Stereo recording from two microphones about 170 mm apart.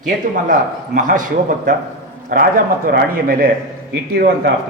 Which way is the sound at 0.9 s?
50° right (ahead or behind).